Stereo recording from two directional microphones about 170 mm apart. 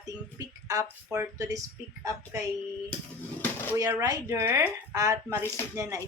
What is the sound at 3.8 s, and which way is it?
A woman's voice, 20° right (ahead or behind).